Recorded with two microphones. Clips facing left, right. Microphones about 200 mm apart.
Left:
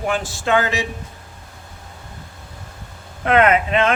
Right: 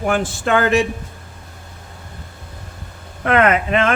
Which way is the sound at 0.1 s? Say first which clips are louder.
Right 2 dB; 55° right (ahead or behind).